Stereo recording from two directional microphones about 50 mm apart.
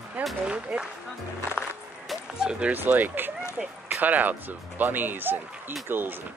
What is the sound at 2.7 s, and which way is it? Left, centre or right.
Speech, right.